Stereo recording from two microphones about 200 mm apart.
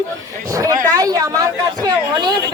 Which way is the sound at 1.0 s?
15° right (ahead or behind).